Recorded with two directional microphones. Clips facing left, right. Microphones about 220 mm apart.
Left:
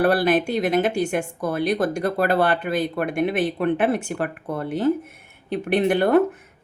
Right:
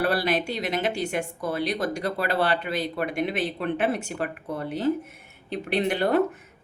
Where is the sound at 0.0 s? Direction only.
50° left (ahead or behind).